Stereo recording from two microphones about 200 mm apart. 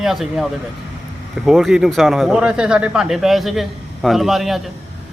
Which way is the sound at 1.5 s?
Centre (ahead or behind).